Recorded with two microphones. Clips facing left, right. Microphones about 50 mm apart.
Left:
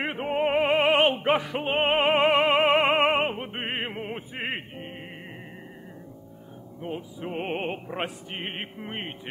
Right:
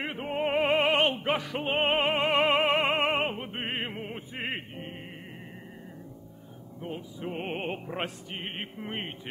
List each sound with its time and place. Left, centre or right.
0.0 s opera: left
0.6 s opera: centre
2.0 s mantra: left
2.3 s music: centre
6.8 s opera: centre
8.3 s mantra: left
8.7 s opera: centre